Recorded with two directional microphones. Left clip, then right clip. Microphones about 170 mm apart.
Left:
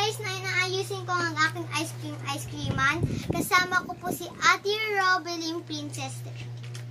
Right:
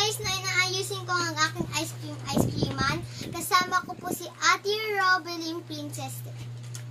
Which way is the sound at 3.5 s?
10° left (ahead or behind).